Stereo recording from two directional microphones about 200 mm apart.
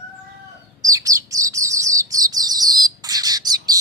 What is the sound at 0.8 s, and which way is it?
Bird, 15° right (ahead or behind).